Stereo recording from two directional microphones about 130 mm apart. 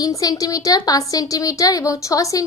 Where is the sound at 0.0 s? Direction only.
25° left (ahead or behind).